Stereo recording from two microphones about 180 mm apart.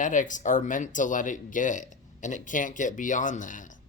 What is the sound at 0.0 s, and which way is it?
Speech, 45° left (ahead or behind).